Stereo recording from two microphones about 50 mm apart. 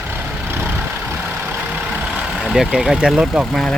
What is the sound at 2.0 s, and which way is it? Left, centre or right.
Vehicle, centre.